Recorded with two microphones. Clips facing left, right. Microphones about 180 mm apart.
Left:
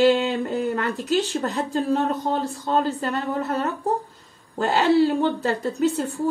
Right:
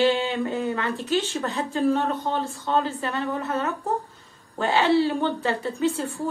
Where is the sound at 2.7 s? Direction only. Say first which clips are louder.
Left 2 dB; 40° left (ahead or behind).